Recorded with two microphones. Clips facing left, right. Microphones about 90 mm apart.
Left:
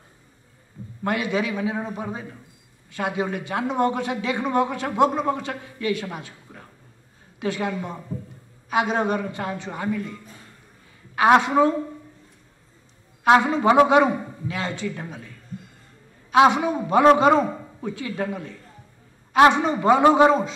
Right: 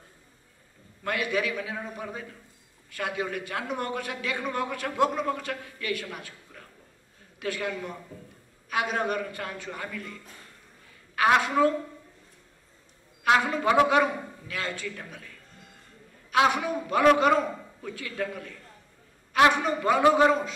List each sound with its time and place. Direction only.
1.0 s a man's voice: 25° left (ahead or behind)
11.1 s a man's voice: 25° left (ahead or behind)
13.2 s a man's voice: 20° left (ahead or behind)